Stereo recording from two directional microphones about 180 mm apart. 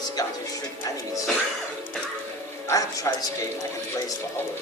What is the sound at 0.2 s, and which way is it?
Speech, 20° left (ahead or behind).